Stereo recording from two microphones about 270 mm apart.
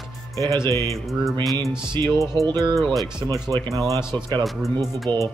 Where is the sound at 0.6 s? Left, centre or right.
Centre.